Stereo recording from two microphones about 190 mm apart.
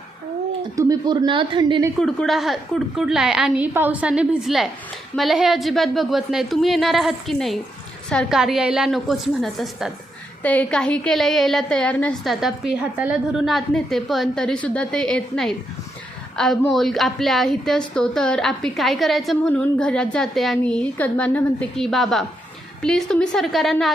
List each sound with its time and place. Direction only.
0.8 s speech: 20° right (ahead or behind)
2.0 s a woman's voice: centre (ahead or behind)